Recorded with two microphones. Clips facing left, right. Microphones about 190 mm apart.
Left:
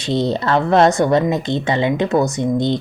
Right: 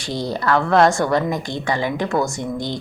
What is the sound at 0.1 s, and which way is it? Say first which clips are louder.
A woman's voice: left 3 dB; 25° left (ahead or behind).